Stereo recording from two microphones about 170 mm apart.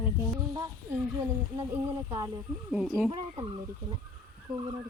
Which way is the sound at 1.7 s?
20° right (ahead or behind).